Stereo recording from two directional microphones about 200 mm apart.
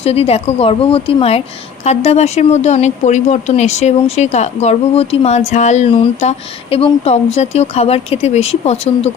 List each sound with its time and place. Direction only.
0.0 s a woman's voice: 30° left (ahead or behind)